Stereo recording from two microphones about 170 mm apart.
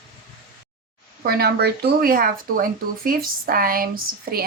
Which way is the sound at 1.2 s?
65° right (ahead or behind).